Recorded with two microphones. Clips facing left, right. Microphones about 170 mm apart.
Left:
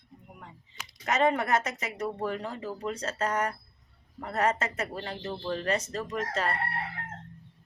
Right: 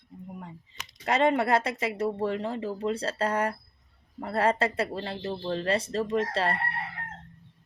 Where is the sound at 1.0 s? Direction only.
30° right (ahead or behind).